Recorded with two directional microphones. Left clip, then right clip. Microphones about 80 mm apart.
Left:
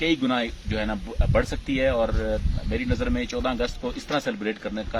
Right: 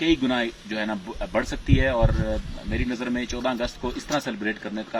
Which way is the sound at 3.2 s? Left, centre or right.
Left.